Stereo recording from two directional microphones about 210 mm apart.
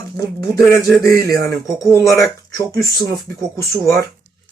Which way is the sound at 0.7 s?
15° left (ahead or behind).